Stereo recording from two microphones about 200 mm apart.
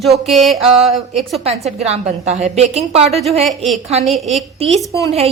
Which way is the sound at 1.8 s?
35° right (ahead or behind).